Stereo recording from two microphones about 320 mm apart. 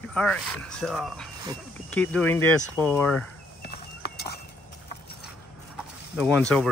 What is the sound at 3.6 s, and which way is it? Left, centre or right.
Horse, left.